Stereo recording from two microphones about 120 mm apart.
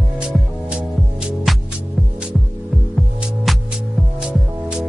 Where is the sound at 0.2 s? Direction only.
10° right (ahead or behind).